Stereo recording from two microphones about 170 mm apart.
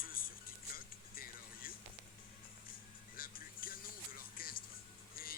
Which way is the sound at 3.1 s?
55° left (ahead or behind).